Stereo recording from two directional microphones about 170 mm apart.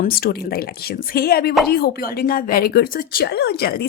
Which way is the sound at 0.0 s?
60° left (ahead or behind).